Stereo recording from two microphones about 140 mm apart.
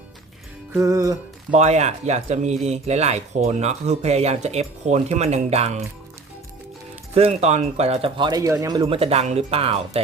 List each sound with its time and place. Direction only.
0.7 s music: 20° right (ahead or behind)
1.5 s speech: 50° right (ahead or behind)
7.1 s speech: 45° right (ahead or behind); by 8.9 s 25° right (ahead or behind)
8.9 s speech: 45° right (ahead or behind)